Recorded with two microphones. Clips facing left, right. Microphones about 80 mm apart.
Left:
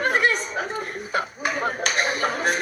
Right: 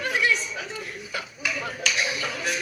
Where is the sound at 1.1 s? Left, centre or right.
Left.